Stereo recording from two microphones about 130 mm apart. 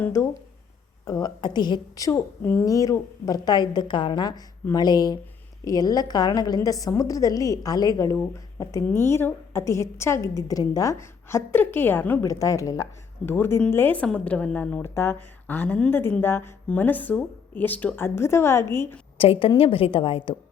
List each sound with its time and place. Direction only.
0.0 s a woman's voice: 20° left (ahead or behind)
19.1 s a woman's voice: 45° left (ahead or behind)